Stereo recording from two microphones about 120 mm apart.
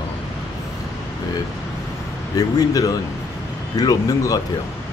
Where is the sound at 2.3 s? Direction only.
30° left (ahead or behind).